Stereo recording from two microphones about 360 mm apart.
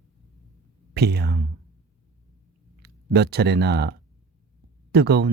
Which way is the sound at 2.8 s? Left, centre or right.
Right.